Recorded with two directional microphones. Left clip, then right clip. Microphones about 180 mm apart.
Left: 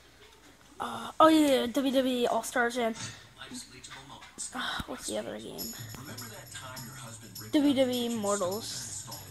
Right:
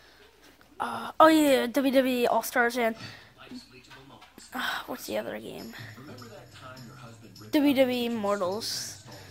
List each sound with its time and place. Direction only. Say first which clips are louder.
0.7 s speech: right 3 dB; 10° right (ahead or behind)
4.5 s speech: right 3 dB; 10° right (ahead or behind)
7.5 s speech: right 3 dB; 15° right (ahead or behind)